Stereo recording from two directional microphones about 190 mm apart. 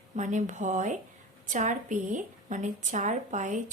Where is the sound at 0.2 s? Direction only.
40° right (ahead or behind).